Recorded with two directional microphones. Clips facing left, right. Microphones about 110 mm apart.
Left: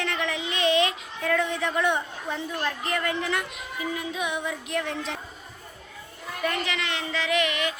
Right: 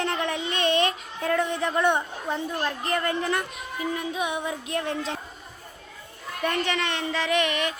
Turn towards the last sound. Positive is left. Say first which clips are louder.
# right 1 dB
turn(degrees=-35)  # may be behind; listen again after turning